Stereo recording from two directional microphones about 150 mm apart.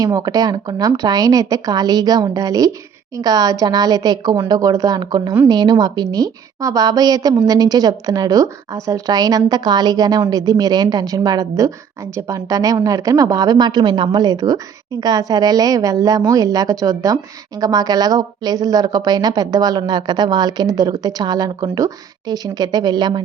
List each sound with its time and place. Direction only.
0.0 s a woman's voice: 25° right (ahead or behind)